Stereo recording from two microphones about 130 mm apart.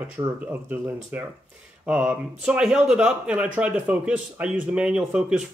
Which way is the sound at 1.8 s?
10° right (ahead or behind).